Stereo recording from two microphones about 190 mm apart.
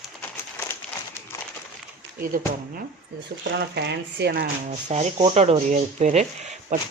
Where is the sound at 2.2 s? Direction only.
50° right (ahead or behind).